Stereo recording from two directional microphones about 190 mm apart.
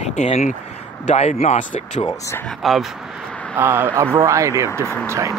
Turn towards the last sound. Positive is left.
turn(degrees=-15)  # may be behind; listen again after turning